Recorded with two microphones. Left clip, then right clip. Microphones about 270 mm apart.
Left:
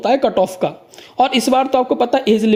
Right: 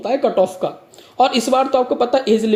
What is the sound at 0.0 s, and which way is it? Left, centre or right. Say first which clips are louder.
Speech: left 2 dB; left.